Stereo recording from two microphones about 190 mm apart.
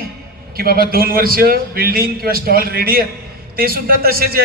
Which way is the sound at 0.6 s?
50° right (ahead or behind).